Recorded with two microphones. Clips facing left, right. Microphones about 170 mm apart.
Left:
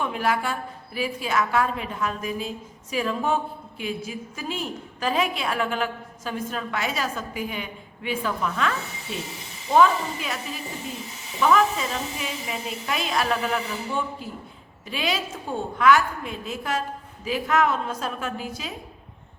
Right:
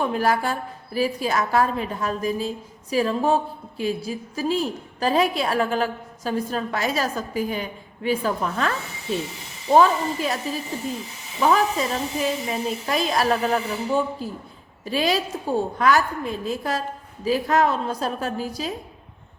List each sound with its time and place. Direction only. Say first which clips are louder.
0.0 s a woman's voice: right 3 dB; 40° right (ahead or behind)
9.7 s a woman's voice: right 2 dB; 35° right (ahead or behind)